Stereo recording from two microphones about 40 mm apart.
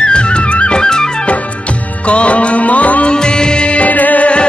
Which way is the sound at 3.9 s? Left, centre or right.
Left.